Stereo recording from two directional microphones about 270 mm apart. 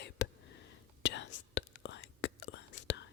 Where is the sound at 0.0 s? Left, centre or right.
Left.